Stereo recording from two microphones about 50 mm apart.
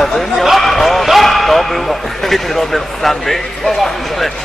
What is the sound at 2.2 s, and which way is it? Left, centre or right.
Speech, centre.